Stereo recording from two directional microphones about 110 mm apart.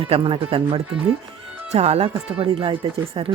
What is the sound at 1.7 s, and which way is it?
Speech, 75° right (ahead or behind).